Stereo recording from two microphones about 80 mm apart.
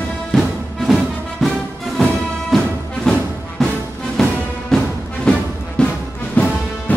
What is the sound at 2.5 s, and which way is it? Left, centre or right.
Music, centre.